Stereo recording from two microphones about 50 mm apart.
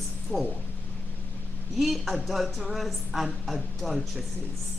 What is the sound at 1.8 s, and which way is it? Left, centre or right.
A woman's voice, centre.